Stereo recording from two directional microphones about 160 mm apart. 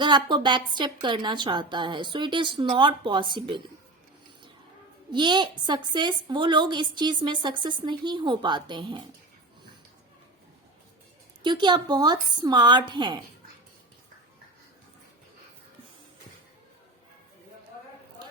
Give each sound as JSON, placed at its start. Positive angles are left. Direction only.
{"t": 0.0, "sound": "a woman's voice", "side_deg": -30}
{"t": 5.1, "sound": "a woman's voice", "side_deg": -30}
{"t": 11.4, "sound": "a woman's voice", "side_deg": -30}